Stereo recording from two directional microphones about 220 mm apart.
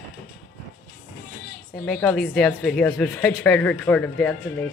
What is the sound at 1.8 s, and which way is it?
Speech, 5° left (ahead or behind).